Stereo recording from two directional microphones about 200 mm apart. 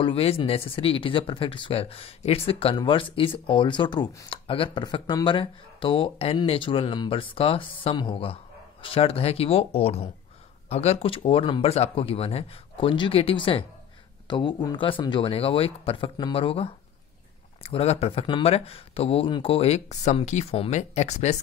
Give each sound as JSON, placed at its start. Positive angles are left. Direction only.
{"t": 0.0, "sound": "speech", "side_deg": 30}